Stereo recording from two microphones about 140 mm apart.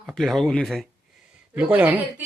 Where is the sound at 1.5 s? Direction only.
10° right (ahead or behind).